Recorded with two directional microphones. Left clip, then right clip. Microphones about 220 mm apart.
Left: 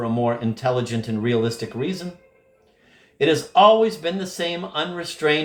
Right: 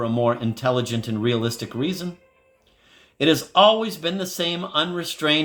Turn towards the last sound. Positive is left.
turn(degrees=-50)  # may be behind; listen again after turning